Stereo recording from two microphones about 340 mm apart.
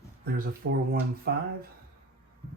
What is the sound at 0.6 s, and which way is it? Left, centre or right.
Speech, right.